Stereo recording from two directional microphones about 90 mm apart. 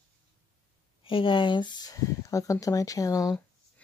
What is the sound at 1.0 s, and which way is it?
Speech, 75° left (ahead or behind).